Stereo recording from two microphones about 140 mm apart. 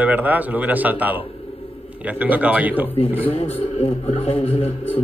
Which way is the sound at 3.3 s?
45° left (ahead or behind).